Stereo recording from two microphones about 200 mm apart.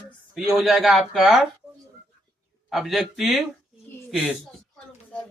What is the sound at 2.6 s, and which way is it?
Speech, centre (ahead or behind).